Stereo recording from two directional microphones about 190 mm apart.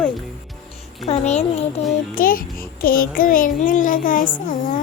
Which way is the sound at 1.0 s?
35° left (ahead or behind).